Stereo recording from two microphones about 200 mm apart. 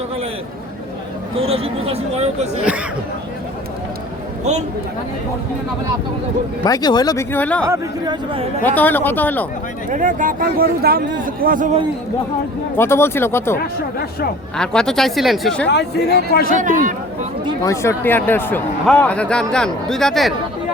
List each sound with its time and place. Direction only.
1.4 s speech: 30° right (ahead or behind)
6.7 s speech: 20° left (ahead or behind)
7.7 s speech: 20° right (ahead or behind)
8.6 s speech: 10° left (ahead or behind)
9.9 s speech: 40° right (ahead or behind)
12.7 s speech: 10° left (ahead or behind)
15.6 s speech: 55° left (ahead or behind)
16.6 s speech: 40° right (ahead or behind)
17.7 s speech: 10° left (ahead or behind)